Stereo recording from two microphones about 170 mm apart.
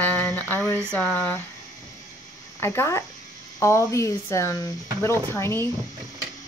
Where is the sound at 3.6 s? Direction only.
15° left (ahead or behind).